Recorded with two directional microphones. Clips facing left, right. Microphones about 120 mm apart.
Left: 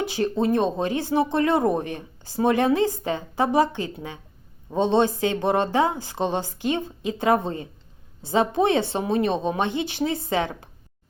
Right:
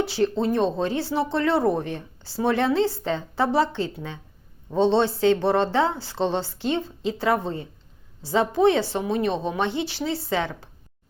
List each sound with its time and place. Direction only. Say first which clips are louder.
0.0 s speech: right 1 dB; 15° left (ahead or behind)